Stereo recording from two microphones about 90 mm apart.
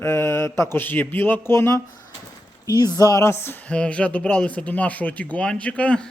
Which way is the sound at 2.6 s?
45° left (ahead or behind).